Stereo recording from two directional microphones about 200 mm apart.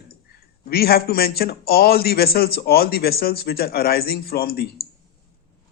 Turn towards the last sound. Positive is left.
turn(degrees=50)  # may be behind; listen again after turning